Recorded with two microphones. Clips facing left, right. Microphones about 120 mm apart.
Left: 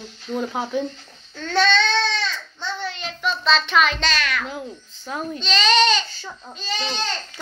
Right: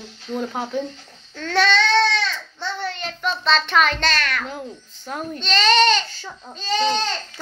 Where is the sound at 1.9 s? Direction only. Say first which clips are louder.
Right 4 dB; 75° right (ahead or behind).